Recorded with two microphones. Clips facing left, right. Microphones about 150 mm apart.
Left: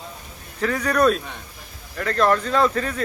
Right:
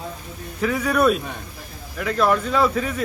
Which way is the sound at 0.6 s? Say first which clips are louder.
Even; 5° right (ahead or behind).